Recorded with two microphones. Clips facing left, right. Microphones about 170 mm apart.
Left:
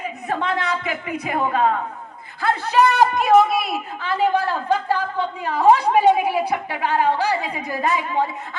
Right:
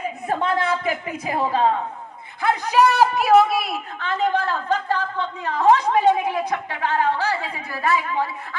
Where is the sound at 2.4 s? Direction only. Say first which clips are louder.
Even; 15° right (ahead or behind).